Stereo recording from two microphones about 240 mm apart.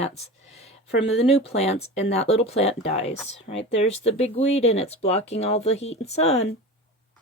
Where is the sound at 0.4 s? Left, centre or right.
Left.